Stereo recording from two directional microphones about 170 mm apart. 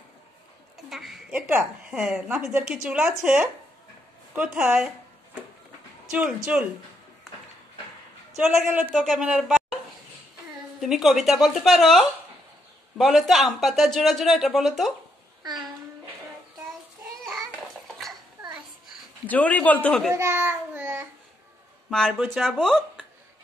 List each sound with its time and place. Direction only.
0.8 s a sound: centre (ahead or behind)
1.9 s speech: 5° right (ahead or behind)
8.9 s speech: centre (ahead or behind)
10.8 s speech: centre (ahead or behind)
17.2 s a sound: centre (ahead or behind)
17.9 s dishes: centre (ahead or behind)
19.2 s speech: 10° left (ahead or behind)
20.2 s child singing: 15° right (ahead or behind)
21.9 s speech: 5° left (ahead or behind)